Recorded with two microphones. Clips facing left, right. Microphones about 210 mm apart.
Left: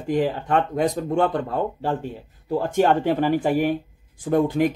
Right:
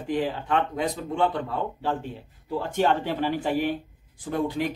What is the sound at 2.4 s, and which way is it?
Speech, 45° left (ahead or behind).